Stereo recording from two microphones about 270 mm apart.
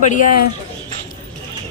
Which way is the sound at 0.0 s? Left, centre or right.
Left.